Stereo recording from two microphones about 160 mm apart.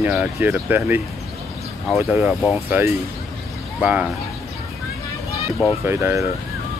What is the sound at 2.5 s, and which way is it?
Speech, 10° right (ahead or behind).